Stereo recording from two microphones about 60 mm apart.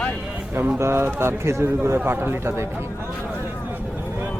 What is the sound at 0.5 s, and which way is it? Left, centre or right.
Speech, right.